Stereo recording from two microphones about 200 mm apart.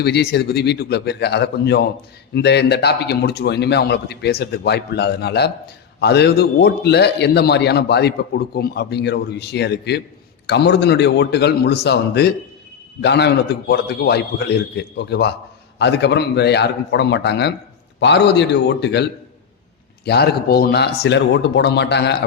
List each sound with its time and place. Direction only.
0.0 s a man's voice: 55° left (ahead or behind)
20.1 s a man's voice: 55° left (ahead or behind)